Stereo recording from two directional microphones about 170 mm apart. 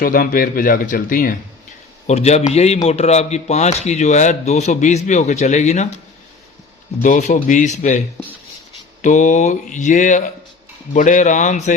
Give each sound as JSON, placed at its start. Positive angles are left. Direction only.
{"t": 0.0, "sound": "speech", "side_deg": 55}
{"t": 2.0, "sound": "speech", "side_deg": 40}
{"t": 7.0, "sound": "mantra", "side_deg": 50}
{"t": 9.0, "sound": "mantra", "side_deg": 45}